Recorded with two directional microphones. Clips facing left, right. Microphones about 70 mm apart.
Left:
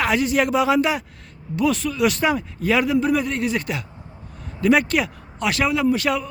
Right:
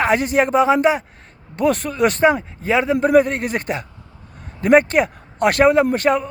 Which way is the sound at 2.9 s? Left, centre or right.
Right.